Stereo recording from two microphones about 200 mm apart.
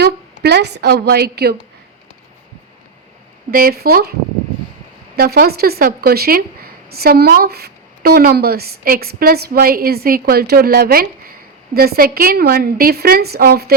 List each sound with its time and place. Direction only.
0.4 s a woman's voice: 55° right (ahead or behind)
3.5 s a woman's voice: 45° right (ahead or behind)
5.1 s a woman's voice: 50° right (ahead or behind)